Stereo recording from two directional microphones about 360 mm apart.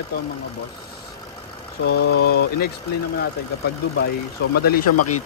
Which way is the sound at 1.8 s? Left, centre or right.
Left.